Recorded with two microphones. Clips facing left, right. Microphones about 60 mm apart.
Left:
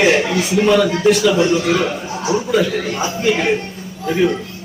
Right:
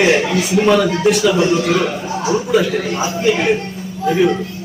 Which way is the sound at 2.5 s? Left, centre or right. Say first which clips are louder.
Right 2 dB; centre.